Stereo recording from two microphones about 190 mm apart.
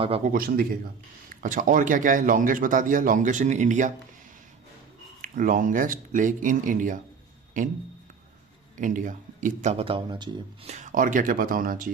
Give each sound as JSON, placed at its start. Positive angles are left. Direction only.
{"t": 0.3, "sound": "speech", "side_deg": -50}
{"t": 5.2, "sound": "speech", "side_deg": -45}
{"t": 8.8, "sound": "speech", "side_deg": -45}
{"t": 10.7, "sound": "speech", "side_deg": -40}